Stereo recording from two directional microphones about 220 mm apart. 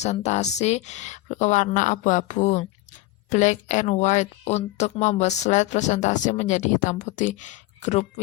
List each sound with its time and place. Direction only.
0.0 s speech: 30° left (ahead or behind)